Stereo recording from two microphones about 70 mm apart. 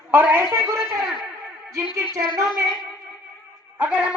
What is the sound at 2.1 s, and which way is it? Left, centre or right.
Speech, right.